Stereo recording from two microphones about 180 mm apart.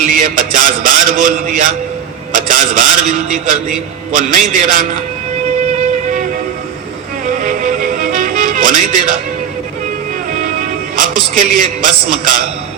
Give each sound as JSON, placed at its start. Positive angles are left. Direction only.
{"t": 0.0, "sound": "a man's voice", "side_deg": -50}
{"t": 2.3, "sound": "a sound", "side_deg": -50}
{"t": 4.1, "sound": "a man's voice", "side_deg": -50}
{"t": 7.4, "sound": "music", "side_deg": -50}
{"t": 10.6, "sound": "a man's voice", "side_deg": -50}